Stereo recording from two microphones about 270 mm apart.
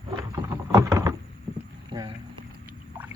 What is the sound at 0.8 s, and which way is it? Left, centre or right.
Rowboat, centre.